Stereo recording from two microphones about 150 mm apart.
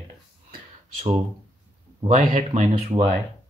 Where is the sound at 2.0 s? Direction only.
50° right (ahead or behind).